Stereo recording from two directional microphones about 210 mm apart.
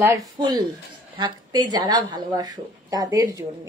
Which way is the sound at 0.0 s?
15° right (ahead or behind).